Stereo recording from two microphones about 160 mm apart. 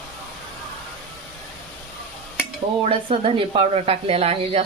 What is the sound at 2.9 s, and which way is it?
Speech, 35° right (ahead or behind).